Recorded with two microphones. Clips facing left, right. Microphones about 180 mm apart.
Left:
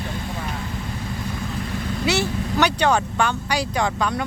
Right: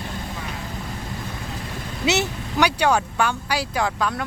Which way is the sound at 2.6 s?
10° right (ahead or behind).